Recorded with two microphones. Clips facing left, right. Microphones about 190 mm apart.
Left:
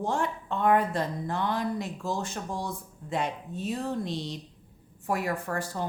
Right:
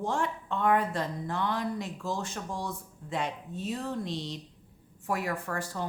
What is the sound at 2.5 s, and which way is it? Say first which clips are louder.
Speech: left 2 dB; 40° left (ahead or behind).